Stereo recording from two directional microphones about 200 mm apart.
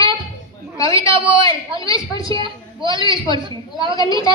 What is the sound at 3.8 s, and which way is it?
Speech, 20° left (ahead or behind).